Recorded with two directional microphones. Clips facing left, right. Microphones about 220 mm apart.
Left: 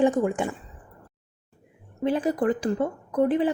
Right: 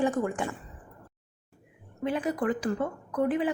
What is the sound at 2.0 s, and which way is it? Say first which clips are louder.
Speech: left 5 dB; 30° left (ahead or behind).